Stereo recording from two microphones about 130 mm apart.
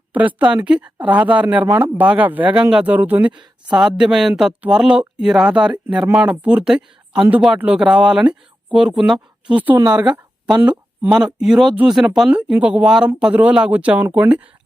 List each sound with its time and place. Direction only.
0.1 s speech: 10° right (ahead or behind)